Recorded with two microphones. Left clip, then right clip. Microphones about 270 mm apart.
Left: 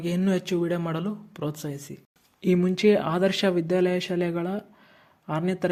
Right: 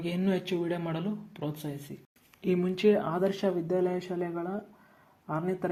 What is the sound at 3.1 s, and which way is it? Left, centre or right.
Speech, left.